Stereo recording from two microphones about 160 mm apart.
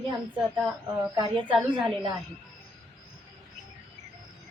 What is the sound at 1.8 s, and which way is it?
Speech, 30° right (ahead or behind).